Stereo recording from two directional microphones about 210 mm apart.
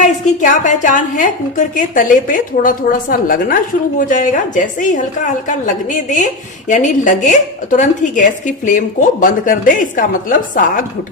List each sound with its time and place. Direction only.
0.0 s a woman's voice: 35° left (ahead or behind)